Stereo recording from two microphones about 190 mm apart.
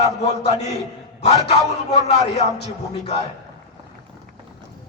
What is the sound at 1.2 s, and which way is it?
A man's voice, 35° left (ahead or behind).